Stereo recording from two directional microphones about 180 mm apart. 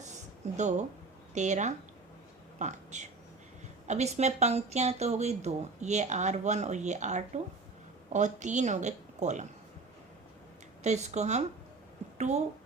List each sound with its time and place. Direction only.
0.5 s speech: 40° right (ahead or behind)
10.8 s speech: 40° right (ahead or behind)
12.1 s a sound: 40° right (ahead or behind)